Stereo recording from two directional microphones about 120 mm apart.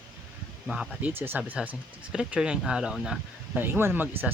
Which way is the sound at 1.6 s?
5° right (ahead or behind).